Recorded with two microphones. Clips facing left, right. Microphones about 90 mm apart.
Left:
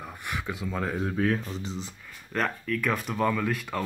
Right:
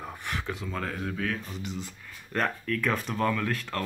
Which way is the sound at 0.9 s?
30° left (ahead or behind).